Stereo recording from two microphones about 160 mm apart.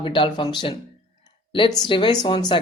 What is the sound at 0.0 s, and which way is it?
Speech, 30° left (ahead or behind).